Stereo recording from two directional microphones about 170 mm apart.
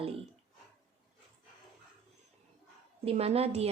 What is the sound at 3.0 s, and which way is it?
Speech, 35° right (ahead or behind).